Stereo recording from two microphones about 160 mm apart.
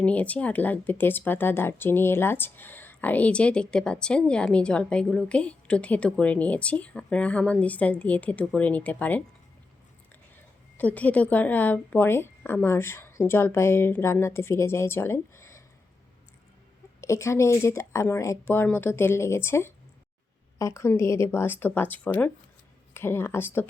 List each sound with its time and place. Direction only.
0.0 s speech: 10° left (ahead or behind)
10.8 s speech: 10° left (ahead or behind)
17.0 s speech: 20° left (ahead or behind)